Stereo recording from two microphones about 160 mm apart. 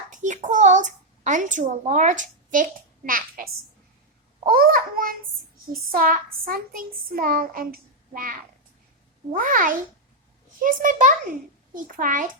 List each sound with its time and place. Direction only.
0.1 s a child's voice: 50° right (ahead or behind)